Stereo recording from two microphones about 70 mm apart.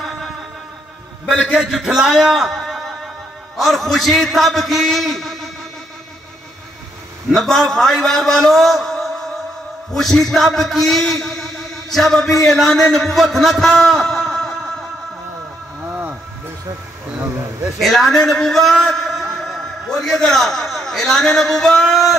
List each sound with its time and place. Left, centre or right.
1.4 s a man's voice: centre
7.3 s a man's voice: centre
15.9 s a sound: right
17.7 s a man's voice: centre